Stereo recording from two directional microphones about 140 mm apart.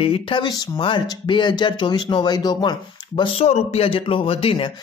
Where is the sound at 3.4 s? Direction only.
50° left (ahead or behind).